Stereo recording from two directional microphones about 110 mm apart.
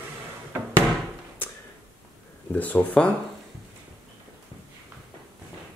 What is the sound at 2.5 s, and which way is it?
Speech, 15° left (ahead or behind).